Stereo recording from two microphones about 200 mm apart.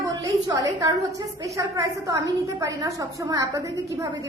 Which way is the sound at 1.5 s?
15° right (ahead or behind).